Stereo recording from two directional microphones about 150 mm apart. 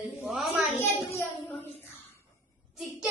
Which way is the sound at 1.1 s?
20° left (ahead or behind).